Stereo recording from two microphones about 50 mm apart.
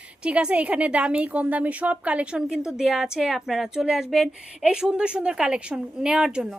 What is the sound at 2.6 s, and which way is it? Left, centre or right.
A woman's voice, centre.